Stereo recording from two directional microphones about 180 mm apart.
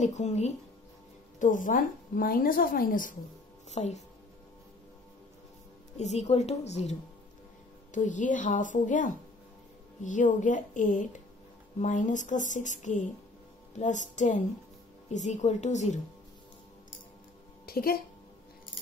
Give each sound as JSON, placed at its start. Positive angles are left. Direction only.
{"t": 0.0, "sound": "a woman's voice", "side_deg": 40}
{"t": 5.9, "sound": "a woman's voice", "side_deg": 40}
{"t": 17.6, "sound": "speech", "side_deg": 55}